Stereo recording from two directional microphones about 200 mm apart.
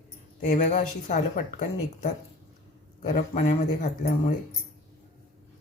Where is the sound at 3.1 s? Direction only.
35° left (ahead or behind).